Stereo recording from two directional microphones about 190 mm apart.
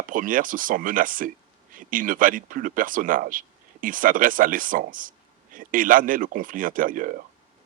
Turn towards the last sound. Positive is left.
turn(degrees=-45)  # may be behind; listen again after turning